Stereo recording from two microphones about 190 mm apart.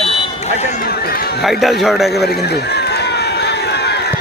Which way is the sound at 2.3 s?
60° left (ahead or behind).